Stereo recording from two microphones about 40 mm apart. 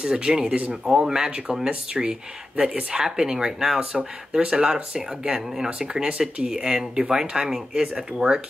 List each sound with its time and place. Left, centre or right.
0.0 s speech: right
5.7 s speech: centre